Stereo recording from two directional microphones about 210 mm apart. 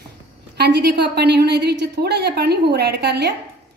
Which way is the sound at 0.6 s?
50° right (ahead or behind).